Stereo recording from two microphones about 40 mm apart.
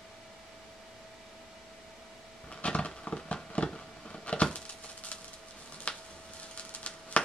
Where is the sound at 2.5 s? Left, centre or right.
Left.